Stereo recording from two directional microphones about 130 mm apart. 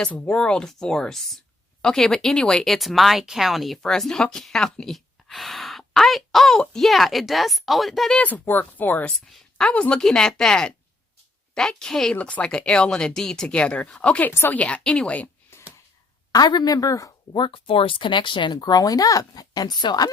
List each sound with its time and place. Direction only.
0.0 s speech: 10° left (ahead or behind)
16.3 s speech: 30° left (ahead or behind)
17.4 s speech: 45° left (ahead or behind)